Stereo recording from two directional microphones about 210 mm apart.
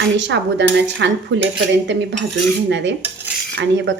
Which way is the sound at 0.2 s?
60° right (ahead or behind).